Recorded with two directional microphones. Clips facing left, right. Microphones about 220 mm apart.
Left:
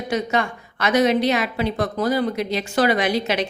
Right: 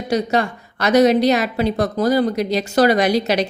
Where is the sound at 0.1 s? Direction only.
35° right (ahead or behind).